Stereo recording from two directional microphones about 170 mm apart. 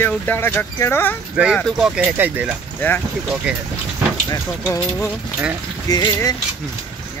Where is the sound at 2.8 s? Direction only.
10° left (ahead or behind).